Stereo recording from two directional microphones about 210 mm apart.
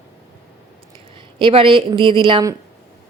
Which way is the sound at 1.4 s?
25° right (ahead or behind).